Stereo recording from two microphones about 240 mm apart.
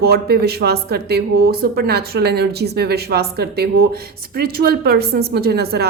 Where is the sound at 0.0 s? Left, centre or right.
Right.